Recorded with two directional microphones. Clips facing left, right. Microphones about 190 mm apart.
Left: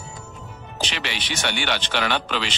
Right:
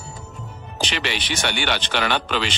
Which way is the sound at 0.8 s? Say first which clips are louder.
Right 4 dB; 65° right (ahead or behind).